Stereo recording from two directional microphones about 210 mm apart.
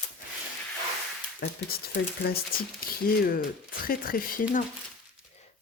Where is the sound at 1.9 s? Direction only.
45° left (ahead or behind).